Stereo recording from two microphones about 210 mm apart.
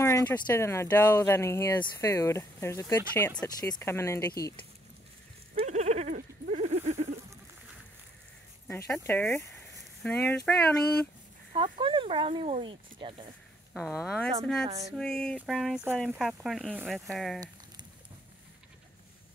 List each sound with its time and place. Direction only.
0.0 s speech: 10° left (ahead or behind)
5.6 s a sound: 30° right (ahead or behind)
8.6 s speech: 10° left (ahead or behind)
11.5 s speech: 25° right (ahead or behind)
13.7 s speech: centre (ahead or behind)